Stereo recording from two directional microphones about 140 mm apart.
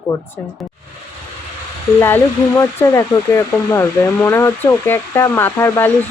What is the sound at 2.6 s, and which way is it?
Speech, 20° left (ahead or behind).